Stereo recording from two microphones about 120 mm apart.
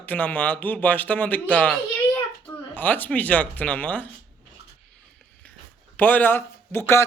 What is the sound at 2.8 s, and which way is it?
Speech, 15° left (ahead or behind).